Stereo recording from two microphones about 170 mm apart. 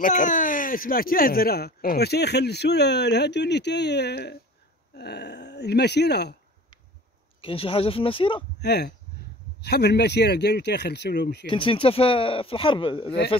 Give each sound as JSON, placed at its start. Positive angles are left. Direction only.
{"t": 0.0, "sound": "speech", "side_deg": 50}
{"t": 7.4, "sound": "speech", "side_deg": 35}
{"t": 8.5, "sound": "speech", "side_deg": 75}
{"t": 11.4, "sound": "speech", "side_deg": 30}